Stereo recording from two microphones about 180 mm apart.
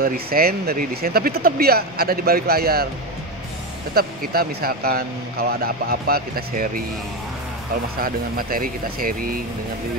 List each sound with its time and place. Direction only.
0.0 s speech: 55° right (ahead or behind)
3.9 s speech: 55° right (ahead or behind)
8.0 s speech: 55° right (ahead or behind)